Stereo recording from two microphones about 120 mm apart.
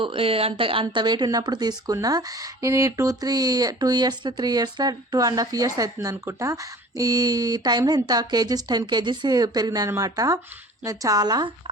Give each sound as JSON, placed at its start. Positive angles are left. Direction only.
{"t": 0.0, "sound": "speech", "side_deg": -50}